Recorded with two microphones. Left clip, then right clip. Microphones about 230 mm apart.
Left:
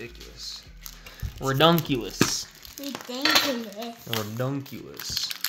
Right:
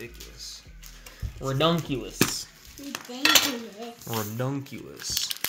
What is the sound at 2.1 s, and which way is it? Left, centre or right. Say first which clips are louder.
Speech: even; centre.